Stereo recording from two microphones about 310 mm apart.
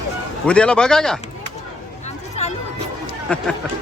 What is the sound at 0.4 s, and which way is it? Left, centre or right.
Speech, centre.